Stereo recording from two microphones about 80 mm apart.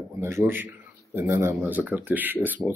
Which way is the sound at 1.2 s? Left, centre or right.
Right.